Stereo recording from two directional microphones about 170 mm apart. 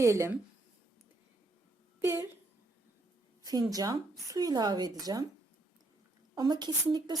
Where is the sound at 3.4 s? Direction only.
20° right (ahead or behind).